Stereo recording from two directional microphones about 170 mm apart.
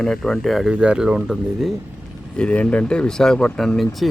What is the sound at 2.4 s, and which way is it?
Speech, 10° left (ahead or behind).